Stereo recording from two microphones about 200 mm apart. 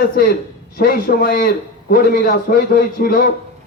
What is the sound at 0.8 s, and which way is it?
A man's voice, 50° left (ahead or behind).